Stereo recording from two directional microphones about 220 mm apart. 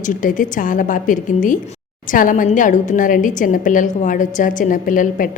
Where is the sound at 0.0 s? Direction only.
35° left (ahead or behind).